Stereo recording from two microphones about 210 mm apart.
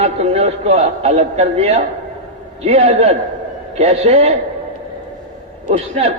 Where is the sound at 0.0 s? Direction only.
30° right (ahead or behind).